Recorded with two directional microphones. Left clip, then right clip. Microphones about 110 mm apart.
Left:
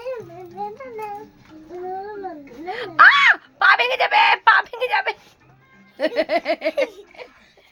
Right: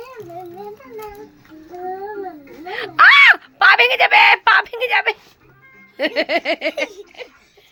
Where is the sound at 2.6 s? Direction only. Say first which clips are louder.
Right 2 dB; 15° right (ahead or behind).